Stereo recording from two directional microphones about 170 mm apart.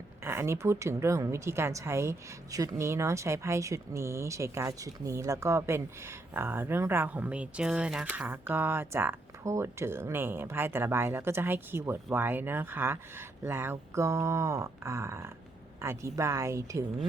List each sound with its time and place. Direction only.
0.3 s a woman's voice: 15° right (ahead or behind)